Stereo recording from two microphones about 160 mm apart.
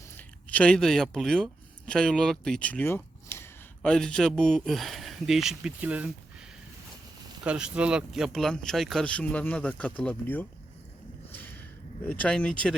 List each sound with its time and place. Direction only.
0.2 s speech: 10° left (ahead or behind)
3.8 s speech: 5° left (ahead or behind)
7.4 s speech: 5° right (ahead or behind); by 10.4 s 10° left (ahead or behind)
11.3 s a sound: 10° left (ahead or behind)
12.0 s speech: 10° left (ahead or behind)